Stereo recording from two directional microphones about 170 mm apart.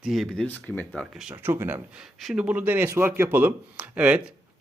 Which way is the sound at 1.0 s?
5° right (ahead or behind).